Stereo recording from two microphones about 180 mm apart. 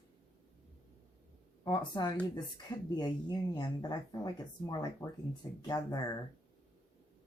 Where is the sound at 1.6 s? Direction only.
25° left (ahead or behind).